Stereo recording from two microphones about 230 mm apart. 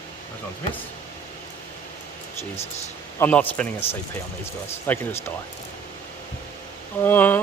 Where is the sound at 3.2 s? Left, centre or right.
Centre.